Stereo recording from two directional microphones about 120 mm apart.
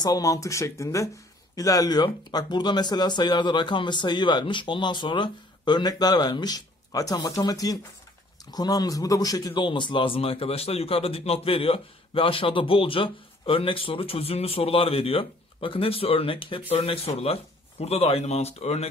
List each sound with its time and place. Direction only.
0.0 s speech: 30° left (ahead or behind); by 18.9 s 60° left (ahead or behind)